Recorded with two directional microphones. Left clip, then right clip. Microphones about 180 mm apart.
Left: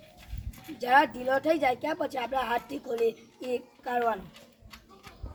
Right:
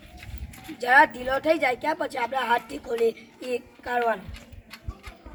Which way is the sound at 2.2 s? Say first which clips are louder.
Right 8 dB; 5° left (ahead or behind).